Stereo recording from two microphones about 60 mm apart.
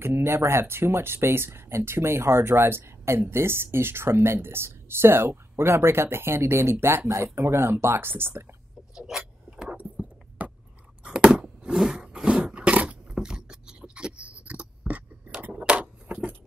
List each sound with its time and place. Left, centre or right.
0.0 s speech: right
8.9 s vehicle: centre
9.6 s keys jangling: centre
11.2 s vehicle: centre
11.7 s a sound: centre; by 15.3 s right
15.5 s a sound: centre